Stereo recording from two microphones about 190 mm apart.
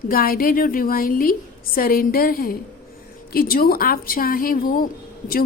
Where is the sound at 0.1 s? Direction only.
50° left (ahead or behind).